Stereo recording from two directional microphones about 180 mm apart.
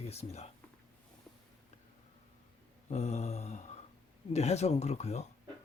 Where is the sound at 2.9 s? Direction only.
40° left (ahead or behind).